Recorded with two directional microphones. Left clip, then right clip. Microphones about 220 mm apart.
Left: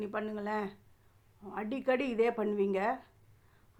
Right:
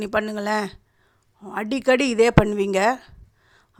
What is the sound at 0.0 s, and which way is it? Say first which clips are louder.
A woman's voice: right 13 dB; 45° right (ahead or behind).